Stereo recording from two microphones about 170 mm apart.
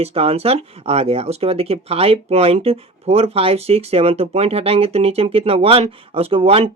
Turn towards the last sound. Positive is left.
turn(degrees=-35)  # may be behind; listen again after turning